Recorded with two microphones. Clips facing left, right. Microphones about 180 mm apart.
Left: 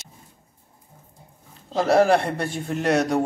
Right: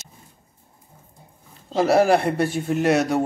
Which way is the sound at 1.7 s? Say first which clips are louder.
Right 1 dB; 5° right (ahead or behind).